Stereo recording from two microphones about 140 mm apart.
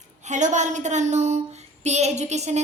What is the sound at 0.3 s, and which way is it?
A woman's voice, 60° right (ahead or behind).